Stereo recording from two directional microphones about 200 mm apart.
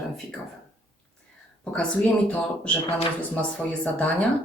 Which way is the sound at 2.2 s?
5° left (ahead or behind).